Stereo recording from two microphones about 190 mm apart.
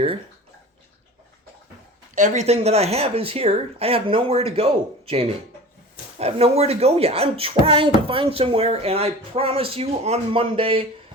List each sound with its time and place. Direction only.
2.1 s speech: 40° right (ahead or behind)